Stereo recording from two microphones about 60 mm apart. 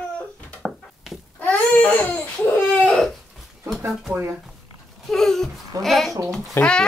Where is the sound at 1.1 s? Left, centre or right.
Centre.